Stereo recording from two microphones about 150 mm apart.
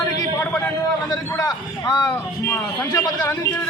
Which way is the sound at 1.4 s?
25° left (ahead or behind).